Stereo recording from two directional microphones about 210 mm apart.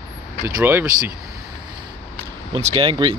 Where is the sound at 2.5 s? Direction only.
25° right (ahead or behind).